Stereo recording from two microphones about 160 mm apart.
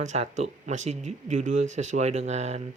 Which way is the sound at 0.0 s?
45° right (ahead or behind).